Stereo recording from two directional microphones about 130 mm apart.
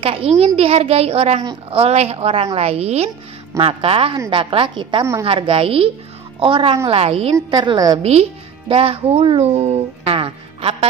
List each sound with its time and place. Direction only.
0.0 s a woman's voice: 45° right (ahead or behind)
7.3 s a woman's voice: 30° right (ahead or behind)
8.0 s speech: 50° right (ahead or behind)